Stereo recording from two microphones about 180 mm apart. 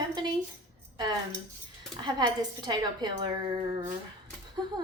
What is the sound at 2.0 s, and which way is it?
Speech, 25° right (ahead or behind).